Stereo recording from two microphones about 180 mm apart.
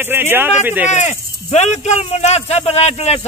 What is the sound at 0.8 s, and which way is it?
Speech, 40° left (ahead or behind).